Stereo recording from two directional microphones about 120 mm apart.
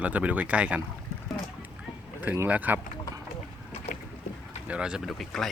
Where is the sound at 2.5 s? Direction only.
15° right (ahead or behind).